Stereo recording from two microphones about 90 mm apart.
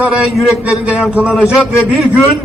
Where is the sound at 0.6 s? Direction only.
15° right (ahead or behind).